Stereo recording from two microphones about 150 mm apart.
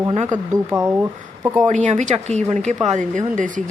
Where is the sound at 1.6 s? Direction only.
50° right (ahead or behind).